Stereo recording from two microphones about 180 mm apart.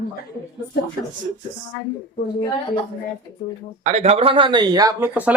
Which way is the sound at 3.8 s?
40° right (ahead or behind).